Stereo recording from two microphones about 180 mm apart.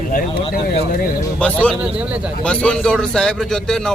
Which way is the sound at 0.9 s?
55° left (ahead or behind).